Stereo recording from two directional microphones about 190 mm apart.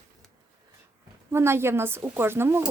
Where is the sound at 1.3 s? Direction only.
15° right (ahead or behind).